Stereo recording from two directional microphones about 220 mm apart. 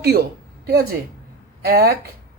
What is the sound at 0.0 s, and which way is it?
Speech, 45° right (ahead or behind).